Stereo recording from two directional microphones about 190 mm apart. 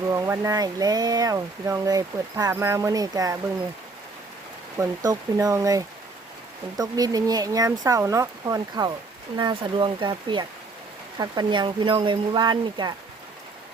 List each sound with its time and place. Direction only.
0.1 s speech: 15° right (ahead or behind)
4.8 s speech: 20° right (ahead or behind)